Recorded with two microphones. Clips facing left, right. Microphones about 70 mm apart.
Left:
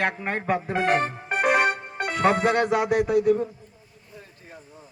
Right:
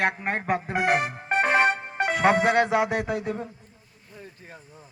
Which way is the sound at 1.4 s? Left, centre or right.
Right.